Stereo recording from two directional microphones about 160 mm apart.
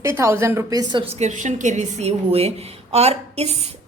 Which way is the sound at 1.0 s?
45° right (ahead or behind).